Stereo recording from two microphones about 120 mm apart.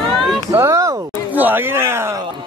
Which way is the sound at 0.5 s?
25° right (ahead or behind).